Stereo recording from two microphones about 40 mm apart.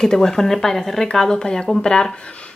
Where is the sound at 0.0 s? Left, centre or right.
Centre.